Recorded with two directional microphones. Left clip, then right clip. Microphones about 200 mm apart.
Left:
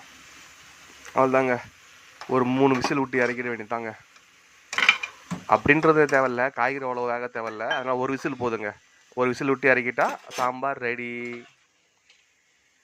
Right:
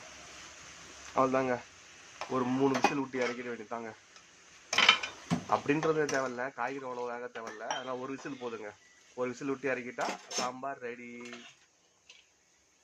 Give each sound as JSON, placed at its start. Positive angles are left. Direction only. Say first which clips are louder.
{"t": 1.1, "sound": "speech", "louder": "left 8 dB", "side_deg": 30}
{"t": 5.5, "sound": "speech", "louder": "left 11 dB", "side_deg": 30}